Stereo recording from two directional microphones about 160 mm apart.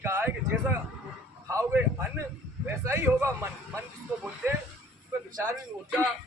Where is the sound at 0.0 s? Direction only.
15° right (ahead or behind).